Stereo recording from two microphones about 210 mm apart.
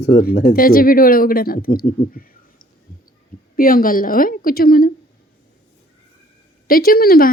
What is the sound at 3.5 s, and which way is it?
Speech, 40° left (ahead or behind).